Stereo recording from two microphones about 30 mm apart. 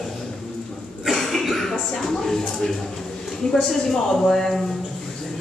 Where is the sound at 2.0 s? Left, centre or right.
Centre.